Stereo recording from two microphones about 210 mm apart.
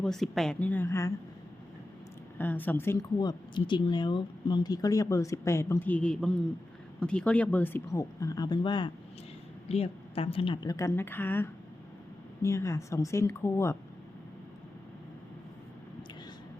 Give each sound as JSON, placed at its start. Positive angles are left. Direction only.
{"t": 0.0, "sound": "speech", "side_deg": 0}
{"t": 2.4, "sound": "a woman's voice", "side_deg": 10}